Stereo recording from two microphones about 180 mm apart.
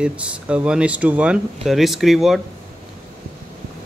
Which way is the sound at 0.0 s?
5° right (ahead or behind).